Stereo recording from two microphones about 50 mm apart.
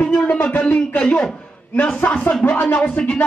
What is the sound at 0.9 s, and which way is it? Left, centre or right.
A man's voice, left.